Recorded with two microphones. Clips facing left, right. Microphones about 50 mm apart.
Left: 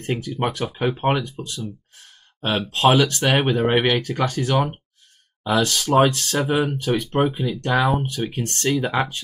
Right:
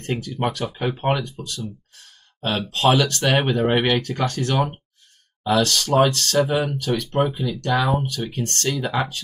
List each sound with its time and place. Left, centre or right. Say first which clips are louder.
0.0 s speech: left 1 dB; centre
2.7 s speech: left 2 dB; centre